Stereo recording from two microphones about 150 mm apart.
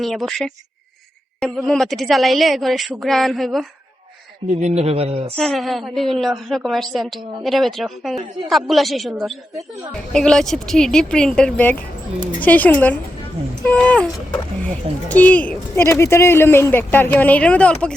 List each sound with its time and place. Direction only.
0.0 s a woman's voice: centre (ahead or behind)
4.6 s a man's voice: 45° right (ahead or behind)
5.4 s a woman's voice: centre (ahead or behind)